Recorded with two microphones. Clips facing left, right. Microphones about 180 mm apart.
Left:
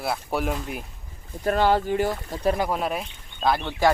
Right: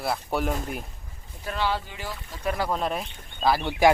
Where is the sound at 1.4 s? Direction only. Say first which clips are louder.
Left 8 dB; 50° left (ahead or behind).